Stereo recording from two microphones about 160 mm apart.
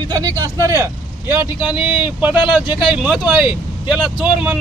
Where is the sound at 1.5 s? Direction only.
30° left (ahead or behind).